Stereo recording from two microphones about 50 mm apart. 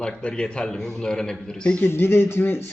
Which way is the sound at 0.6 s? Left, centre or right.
Centre.